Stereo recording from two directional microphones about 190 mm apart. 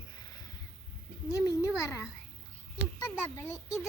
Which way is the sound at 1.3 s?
15° left (ahead or behind).